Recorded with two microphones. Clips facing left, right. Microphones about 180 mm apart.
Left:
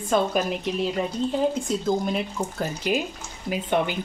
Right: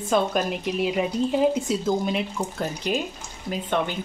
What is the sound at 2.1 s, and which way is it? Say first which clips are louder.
Speech: even; centre (ahead or behind).